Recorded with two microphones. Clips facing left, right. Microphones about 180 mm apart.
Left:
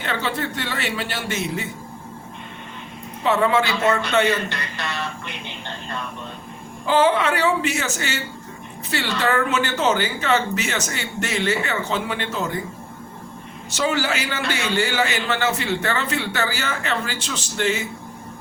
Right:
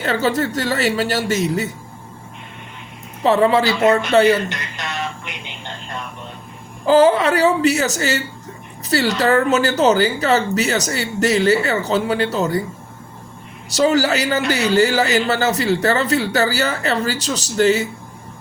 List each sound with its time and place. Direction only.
0.0 s a man's voice: 40° right (ahead or behind)
3.2 s a man's voice: 35° right (ahead or behind)
4.4 s a sound: 20° right (ahead or behind)
6.8 s a man's voice: 40° right (ahead or behind)
13.7 s a man's voice: 40° right (ahead or behind)